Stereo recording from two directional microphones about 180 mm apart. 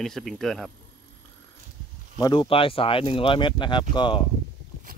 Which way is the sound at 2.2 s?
25° left (ahead or behind).